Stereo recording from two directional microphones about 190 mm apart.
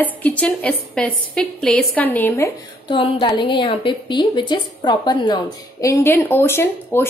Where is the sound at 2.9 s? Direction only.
25° left (ahead or behind).